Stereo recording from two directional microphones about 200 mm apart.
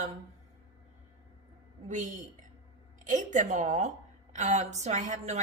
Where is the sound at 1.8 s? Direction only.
40° right (ahead or behind).